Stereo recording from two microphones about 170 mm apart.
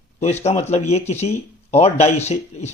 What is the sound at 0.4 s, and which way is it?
A man's voice, 40° left (ahead or behind).